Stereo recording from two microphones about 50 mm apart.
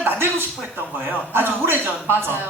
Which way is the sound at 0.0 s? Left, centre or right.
Right.